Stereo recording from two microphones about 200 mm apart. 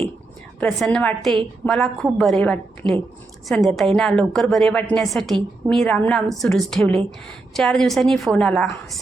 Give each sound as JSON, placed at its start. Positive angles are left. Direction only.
{"t": 0.6, "sound": "a woman's voice", "side_deg": 5}
{"t": 2.8, "sound": "speech", "side_deg": -25}
{"t": 3.5, "sound": "a woman's voice", "side_deg": 0}